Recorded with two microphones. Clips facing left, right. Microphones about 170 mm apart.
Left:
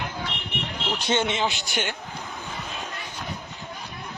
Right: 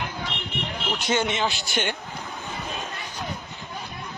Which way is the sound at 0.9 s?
30° left (ahead or behind).